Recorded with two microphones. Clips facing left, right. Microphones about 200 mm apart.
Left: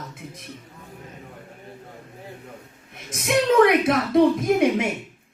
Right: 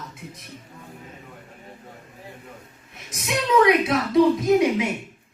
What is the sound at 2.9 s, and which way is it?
A woman's voice, 55° left (ahead or behind).